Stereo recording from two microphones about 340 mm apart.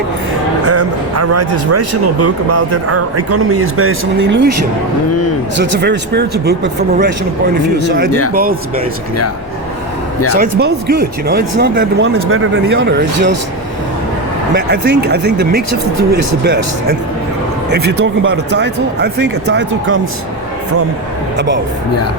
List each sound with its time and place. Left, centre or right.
0.6 s speech: right
5.5 s speech: right
8.3 s speech: right
10.3 s speech: right
14.5 s a man's voice: right
21.3 s speech: right